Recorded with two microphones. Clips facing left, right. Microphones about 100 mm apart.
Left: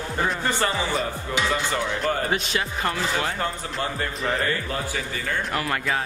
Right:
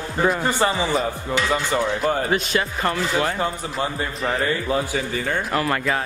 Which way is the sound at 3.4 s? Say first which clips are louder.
Right 3 dB; 5° right (ahead or behind).